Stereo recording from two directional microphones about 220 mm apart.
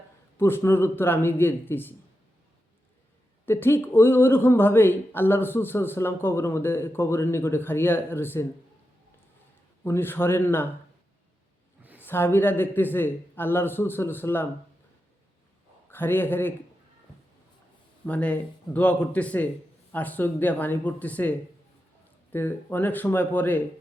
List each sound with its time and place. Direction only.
0.3 s speech: 10° left (ahead or behind)
3.4 s speech: 10° left (ahead or behind)
9.8 s speech: 10° left (ahead or behind)
11.9 s speech: 10° left (ahead or behind)
15.9 s speech: 10° left (ahead or behind)
18.0 s speech: 5° left (ahead or behind)